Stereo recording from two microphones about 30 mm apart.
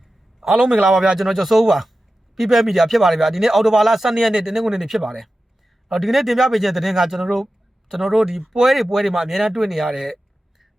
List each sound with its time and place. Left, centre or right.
0.6 s speech: right
1.2 s a man's voice: centre